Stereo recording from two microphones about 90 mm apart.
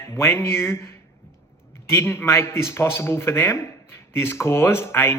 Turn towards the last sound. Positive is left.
turn(degrees=25)  # may be behind; listen again after turning